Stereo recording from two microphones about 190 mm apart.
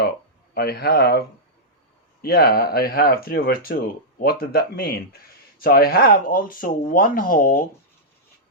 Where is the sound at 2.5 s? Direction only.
55° left (ahead or behind).